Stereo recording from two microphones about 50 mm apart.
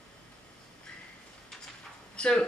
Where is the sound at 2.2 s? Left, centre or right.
Centre.